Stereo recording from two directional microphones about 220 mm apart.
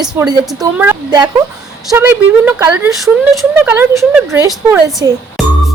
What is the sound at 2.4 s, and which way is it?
A woman's voice, 10° right (ahead or behind).